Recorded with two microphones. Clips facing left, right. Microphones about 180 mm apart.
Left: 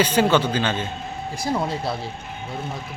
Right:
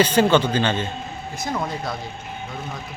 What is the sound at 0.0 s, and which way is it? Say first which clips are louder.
Speech: right 2 dB; 10° left (ahead or behind).